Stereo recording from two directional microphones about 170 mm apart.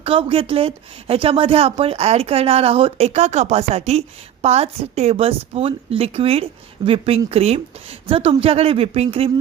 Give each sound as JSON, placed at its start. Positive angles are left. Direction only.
{"t": 0.0, "sound": "a woman's voice", "side_deg": -30}